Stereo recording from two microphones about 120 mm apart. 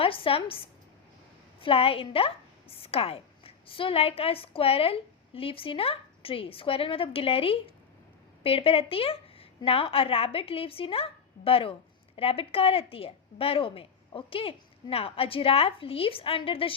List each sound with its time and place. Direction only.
0.0 s a woman's voice: 50° left (ahead or behind)